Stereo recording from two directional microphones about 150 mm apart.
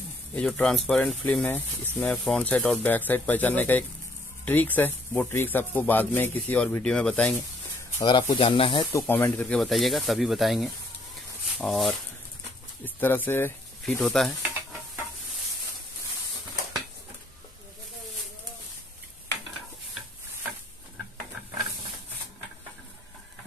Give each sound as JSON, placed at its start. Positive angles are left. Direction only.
{"t": 0.3, "sound": "speech", "side_deg": 5}
{"t": 8.0, "sound": "speech", "side_deg": 30}
{"t": 8.9, "sound": "speech", "side_deg": 15}
{"t": 12.8, "sound": "speech", "side_deg": 15}
{"t": 13.8, "sound": "speech", "side_deg": 0}